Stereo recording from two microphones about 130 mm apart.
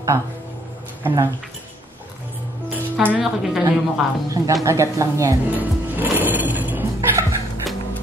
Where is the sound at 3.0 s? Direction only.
10° right (ahead or behind).